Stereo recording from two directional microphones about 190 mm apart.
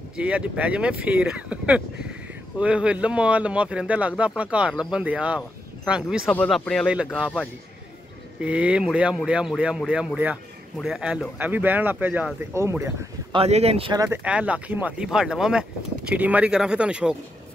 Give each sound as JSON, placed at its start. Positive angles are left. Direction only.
{"t": 0.2, "sound": "speech", "side_deg": -5}
{"t": 8.4, "sound": "speech", "side_deg": -5}
{"t": 13.4, "sound": "speech", "side_deg": -35}
{"t": 14.0, "sound": "speech", "side_deg": -10}